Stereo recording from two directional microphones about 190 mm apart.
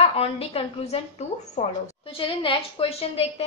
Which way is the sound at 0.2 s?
30° left (ahead or behind).